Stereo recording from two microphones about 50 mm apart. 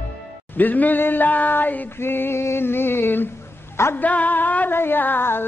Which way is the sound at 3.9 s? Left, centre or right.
Left.